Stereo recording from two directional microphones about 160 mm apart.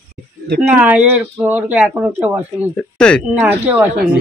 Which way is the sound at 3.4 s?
10° right (ahead or behind).